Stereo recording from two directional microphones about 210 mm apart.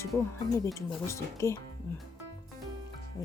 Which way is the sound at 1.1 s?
15° left (ahead or behind).